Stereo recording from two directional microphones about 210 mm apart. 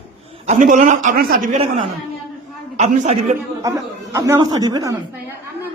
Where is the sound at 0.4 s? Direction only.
35° right (ahead or behind).